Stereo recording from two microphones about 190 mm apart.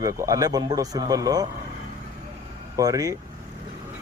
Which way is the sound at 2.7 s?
20° right (ahead or behind).